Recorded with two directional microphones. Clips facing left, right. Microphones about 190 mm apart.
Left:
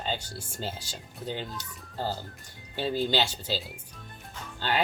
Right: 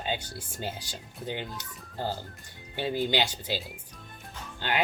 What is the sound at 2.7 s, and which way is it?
Speech, 15° right (ahead or behind).